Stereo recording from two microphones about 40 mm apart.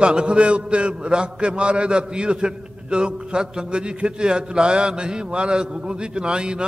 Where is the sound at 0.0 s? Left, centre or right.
Right.